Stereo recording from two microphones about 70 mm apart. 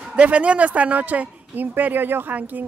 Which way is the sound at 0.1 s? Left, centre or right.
Centre.